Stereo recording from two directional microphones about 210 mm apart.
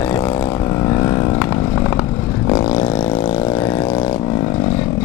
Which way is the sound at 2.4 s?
25° left (ahead or behind).